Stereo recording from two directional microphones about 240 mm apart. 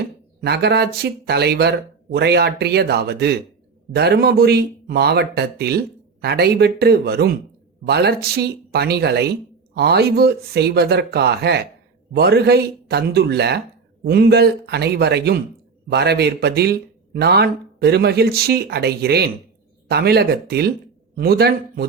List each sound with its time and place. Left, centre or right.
0.4 s speech: right